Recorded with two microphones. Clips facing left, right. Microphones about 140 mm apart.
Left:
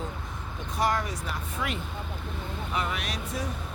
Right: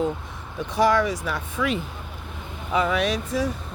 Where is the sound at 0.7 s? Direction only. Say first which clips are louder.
Right 8 dB; 90° right.